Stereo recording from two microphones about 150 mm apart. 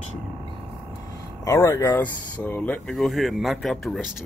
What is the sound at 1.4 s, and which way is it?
Speech, 20° left (ahead or behind).